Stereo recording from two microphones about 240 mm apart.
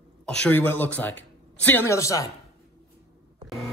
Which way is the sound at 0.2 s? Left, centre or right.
Centre.